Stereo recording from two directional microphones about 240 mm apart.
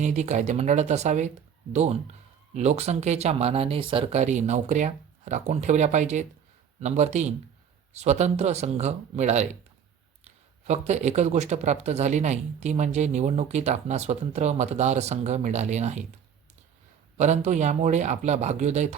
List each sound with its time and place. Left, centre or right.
0.0 s speech: right
17.2 s speech: right